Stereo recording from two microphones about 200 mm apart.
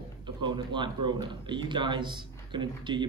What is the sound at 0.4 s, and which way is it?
A man's voice, 25° right (ahead or behind).